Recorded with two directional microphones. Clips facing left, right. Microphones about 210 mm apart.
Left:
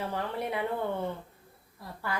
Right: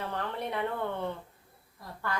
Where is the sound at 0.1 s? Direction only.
10° left (ahead or behind).